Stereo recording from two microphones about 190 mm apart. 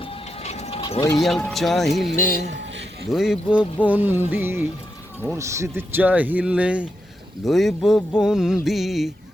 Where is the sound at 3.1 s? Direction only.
Centre (ahead or behind).